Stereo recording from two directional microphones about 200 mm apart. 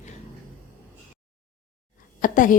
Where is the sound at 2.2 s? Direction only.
40° left (ahead or behind).